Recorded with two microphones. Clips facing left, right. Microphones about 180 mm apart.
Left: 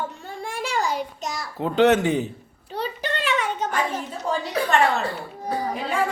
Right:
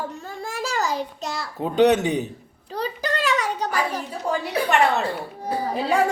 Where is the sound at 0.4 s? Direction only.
40° right (ahead or behind).